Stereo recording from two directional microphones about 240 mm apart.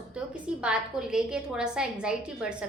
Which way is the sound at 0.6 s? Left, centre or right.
Centre.